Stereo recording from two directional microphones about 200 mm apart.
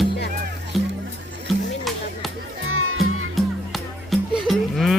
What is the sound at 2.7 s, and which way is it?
Music, 90° right.